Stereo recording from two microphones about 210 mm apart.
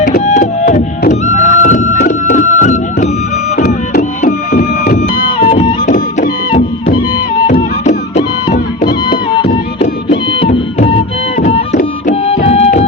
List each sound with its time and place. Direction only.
0.0 s music: 40° left (ahead or behind)
9.4 s music: 25° left (ahead or behind)